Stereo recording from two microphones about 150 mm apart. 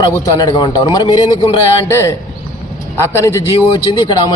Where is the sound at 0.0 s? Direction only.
25° left (ahead or behind).